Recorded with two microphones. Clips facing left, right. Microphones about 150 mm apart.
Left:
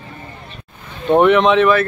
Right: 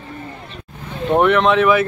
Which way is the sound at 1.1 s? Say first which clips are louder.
Left 3 dB; centre (ahead or behind).